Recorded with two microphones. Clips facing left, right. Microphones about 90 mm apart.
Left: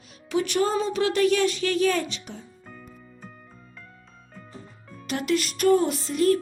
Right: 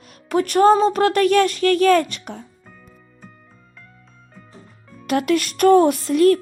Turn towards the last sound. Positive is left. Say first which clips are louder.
# right 7 dB
turn(degrees=-60)  # may be behind; listen again after turning